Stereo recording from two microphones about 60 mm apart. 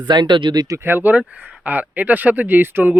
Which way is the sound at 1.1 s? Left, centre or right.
Right.